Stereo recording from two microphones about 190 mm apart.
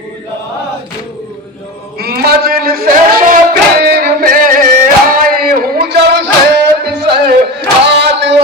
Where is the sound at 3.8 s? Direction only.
55° right (ahead or behind).